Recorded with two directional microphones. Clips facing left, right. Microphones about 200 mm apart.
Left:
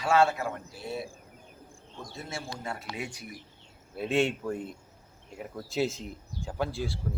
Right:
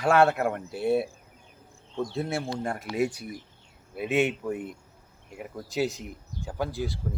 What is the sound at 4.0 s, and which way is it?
Speech, 5° right (ahead or behind).